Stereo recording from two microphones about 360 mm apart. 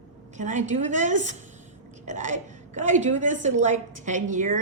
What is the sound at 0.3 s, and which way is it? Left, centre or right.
A woman's voice, centre.